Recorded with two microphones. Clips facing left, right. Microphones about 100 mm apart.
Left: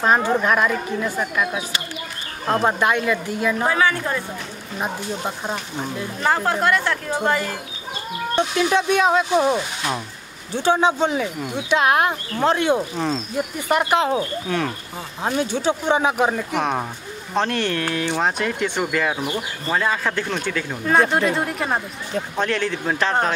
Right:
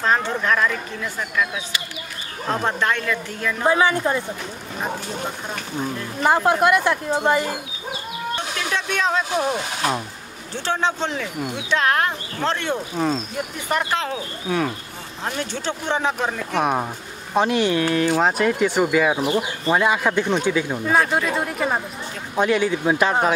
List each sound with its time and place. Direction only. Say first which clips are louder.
0.0 s speech: left 3 dB; 15° left (ahead or behind)
2.6 s speech: left 3 dB; 15° left (ahead or behind)
3.6 s speech: right 5 dB; 20° right (ahead or behind)
6.2 s speech: right 3 dB; 15° right (ahead or behind)
8.4 s speech: left 11 dB; 15° left (ahead or behind)
10.5 s speech: left 5 dB; 10° left (ahead or behind)
12.9 s speech: right 1 dB; 5° right (ahead or behind)
13.7 s speech: left 5 dB; 15° left (ahead or behind)
14.5 s speech: right 3 dB; 10° right (ahead or behind)
15.2 s speech: left 6 dB; 10° left (ahead or behind)
17.3 s speech: right 3 dB; 10° right (ahead or behind)
21.1 s speech: left 2 dB; centre (ahead or behind)